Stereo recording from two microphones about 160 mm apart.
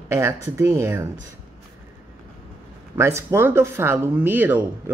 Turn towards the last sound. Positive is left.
turn(degrees=-10)  # may be behind; listen again after turning